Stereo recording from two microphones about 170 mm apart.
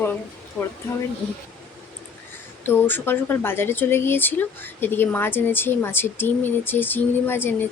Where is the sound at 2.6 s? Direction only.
10° left (ahead or behind).